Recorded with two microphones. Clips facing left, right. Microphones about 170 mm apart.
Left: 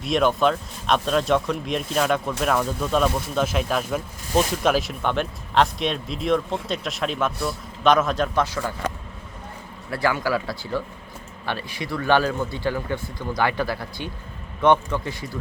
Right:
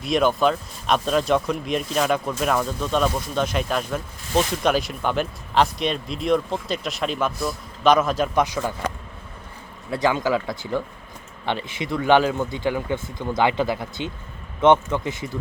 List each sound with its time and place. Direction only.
0.0 s speech: centre (ahead or behind)
8.4 s speech: 15° right (ahead or behind)
9.9 s speech: 20° right (ahead or behind)